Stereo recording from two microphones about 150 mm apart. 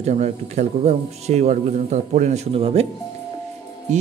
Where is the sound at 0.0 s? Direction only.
50° right (ahead or behind).